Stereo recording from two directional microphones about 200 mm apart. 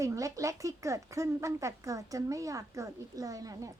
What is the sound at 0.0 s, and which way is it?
Speech, 15° right (ahead or behind).